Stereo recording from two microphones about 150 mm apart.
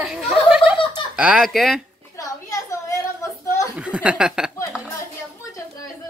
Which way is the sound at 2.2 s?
20° left (ahead or behind).